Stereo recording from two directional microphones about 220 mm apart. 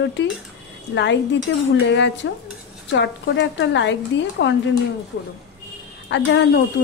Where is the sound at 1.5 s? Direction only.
55° left (ahead or behind).